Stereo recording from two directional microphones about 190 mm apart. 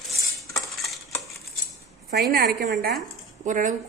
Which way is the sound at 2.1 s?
55° right (ahead or behind).